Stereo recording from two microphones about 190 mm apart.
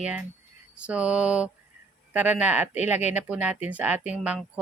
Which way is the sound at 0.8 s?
5° right (ahead or behind).